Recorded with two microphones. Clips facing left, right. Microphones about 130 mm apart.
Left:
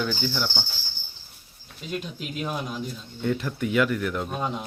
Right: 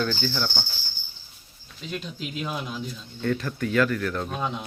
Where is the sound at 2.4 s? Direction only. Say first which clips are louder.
Left 2 dB; 5° left (ahead or behind).